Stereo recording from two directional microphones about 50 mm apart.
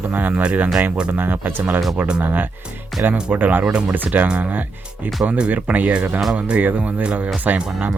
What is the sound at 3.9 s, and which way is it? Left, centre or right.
Speech, right.